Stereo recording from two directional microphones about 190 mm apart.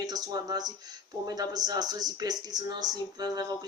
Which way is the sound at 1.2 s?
20° right (ahead or behind).